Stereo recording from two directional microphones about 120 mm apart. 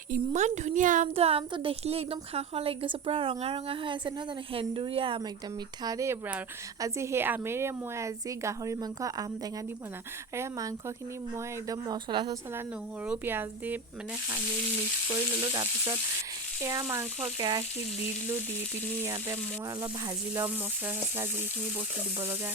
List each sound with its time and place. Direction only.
0.1 s a woman's voice: 85° right; by 5.2 s 45° right (ahead or behind)
5.8 s a woman's voice: 30° right (ahead or behind)
10.3 s a woman's voice: 20° right (ahead or behind); by 12.4 s 40° right (ahead or behind)
13.1 s speech: 15° right (ahead or behind)
15.1 s a woman's voice: 30° right (ahead or behind)
17.3 s a woman's voice: 40° right (ahead or behind)
19.0 s a woman's voice: 25° right (ahead or behind)